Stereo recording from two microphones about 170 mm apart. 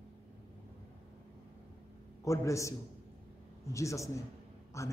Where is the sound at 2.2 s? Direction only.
20° left (ahead or behind).